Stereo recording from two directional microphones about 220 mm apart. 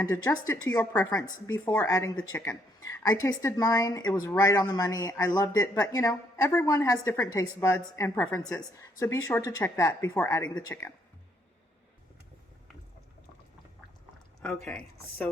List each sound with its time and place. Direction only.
0.0 s speech: 15° left (ahead or behind)
14.4 s speech: 5° left (ahead or behind)